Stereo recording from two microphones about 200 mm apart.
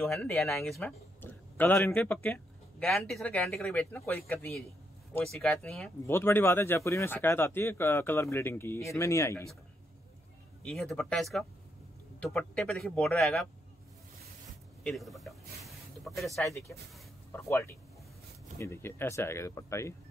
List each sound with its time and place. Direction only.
0.0 s speech: 5° left (ahead or behind)
10.6 s speech: 5° left (ahead or behind)
14.8 s a sound: centre (ahead or behind)
16.4 s speech: 15° left (ahead or behind)